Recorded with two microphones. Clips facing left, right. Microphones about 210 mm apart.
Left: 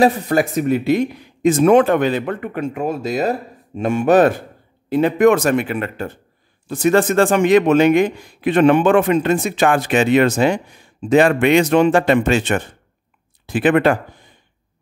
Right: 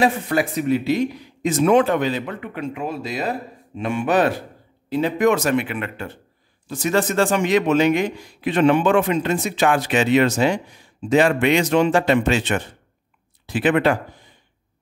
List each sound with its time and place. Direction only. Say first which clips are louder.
0.0 s speech: left 4 dB; 45° left (ahead or behind)
4.8 s speech: left 5 dB; 55° left (ahead or behind)
6.7 s a man's voice: left 6 dB; 55° left (ahead or behind)